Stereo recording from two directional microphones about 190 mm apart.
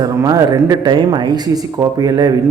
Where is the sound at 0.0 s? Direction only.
20° right (ahead or behind).